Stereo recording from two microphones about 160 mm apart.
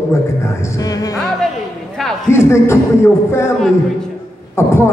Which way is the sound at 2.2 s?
15° left (ahead or behind).